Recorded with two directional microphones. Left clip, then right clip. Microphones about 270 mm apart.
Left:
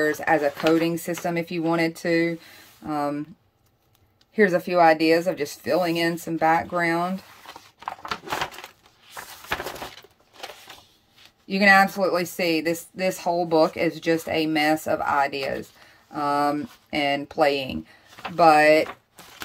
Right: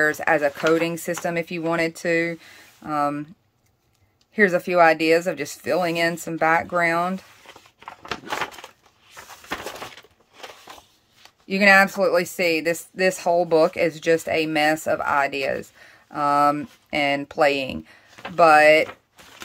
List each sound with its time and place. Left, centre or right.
0.0 s a woman's voice: centre
4.4 s a woman's voice: centre
7.4 s a sound: left
11.4 s a woman's voice: centre